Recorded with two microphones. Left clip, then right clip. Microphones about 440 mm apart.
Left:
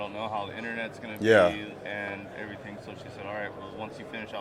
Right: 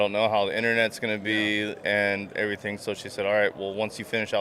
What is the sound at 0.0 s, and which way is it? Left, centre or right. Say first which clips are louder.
Speech: right 10 dB; right.